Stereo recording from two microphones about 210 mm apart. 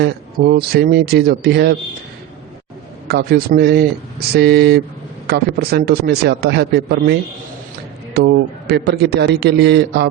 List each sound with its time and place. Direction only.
0.0 s a man's voice: 50° right (ahead or behind)
3.1 s a man's voice: 45° right (ahead or behind)